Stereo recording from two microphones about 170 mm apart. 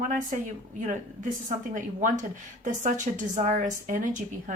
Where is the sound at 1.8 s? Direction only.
45° right (ahead or behind).